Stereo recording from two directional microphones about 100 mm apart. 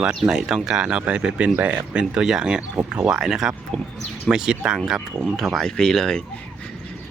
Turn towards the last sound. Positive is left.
turn(degrees=5)  # may be behind; listen again after turning